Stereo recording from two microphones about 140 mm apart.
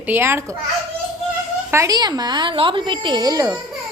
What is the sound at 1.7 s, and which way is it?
A woman's voice, 25° right (ahead or behind).